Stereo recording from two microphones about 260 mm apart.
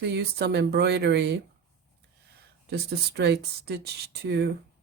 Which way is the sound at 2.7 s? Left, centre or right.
Right.